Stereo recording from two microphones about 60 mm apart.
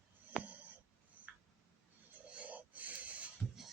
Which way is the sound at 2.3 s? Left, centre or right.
Right.